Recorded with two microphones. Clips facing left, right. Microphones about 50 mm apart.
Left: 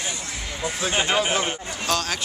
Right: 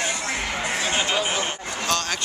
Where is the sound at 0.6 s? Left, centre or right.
Right.